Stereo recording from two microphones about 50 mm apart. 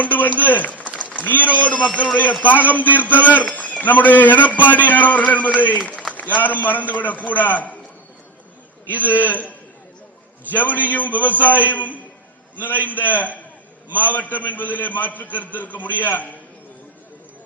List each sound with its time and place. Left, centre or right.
0.0 s a man's voice: left
8.9 s a man's voice: left